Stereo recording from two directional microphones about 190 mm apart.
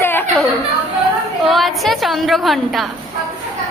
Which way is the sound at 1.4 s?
Centre (ahead or behind).